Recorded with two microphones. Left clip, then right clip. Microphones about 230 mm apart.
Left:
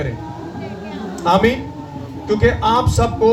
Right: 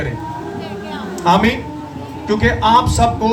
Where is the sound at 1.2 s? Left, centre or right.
Right.